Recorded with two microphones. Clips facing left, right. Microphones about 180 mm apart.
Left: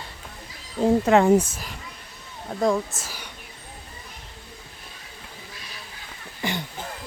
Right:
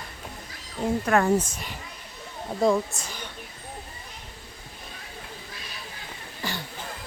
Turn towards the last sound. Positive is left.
turn(degrees=20)  # may be behind; listen again after turning